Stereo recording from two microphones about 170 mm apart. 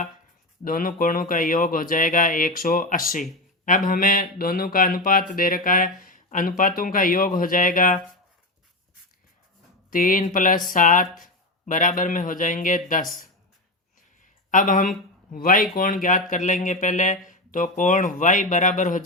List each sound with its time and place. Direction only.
0.6 s speech: 55° left (ahead or behind)
9.9 s speech: 55° left (ahead or behind)
14.5 s speech: 50° left (ahead or behind)